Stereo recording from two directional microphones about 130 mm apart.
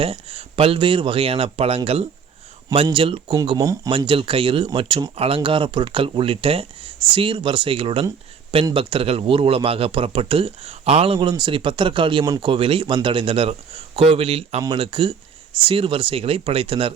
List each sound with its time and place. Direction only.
0.0 s speech: 45° right (ahead or behind)
12.2 s speech: 25° right (ahead or behind)
12.5 s speech: 45° right (ahead or behind)